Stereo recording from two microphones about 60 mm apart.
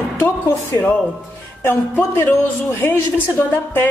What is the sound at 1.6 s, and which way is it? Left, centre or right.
Speech, left.